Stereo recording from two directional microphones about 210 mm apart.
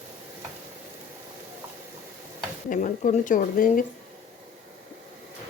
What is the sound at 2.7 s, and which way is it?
Speech, 40° left (ahead or behind).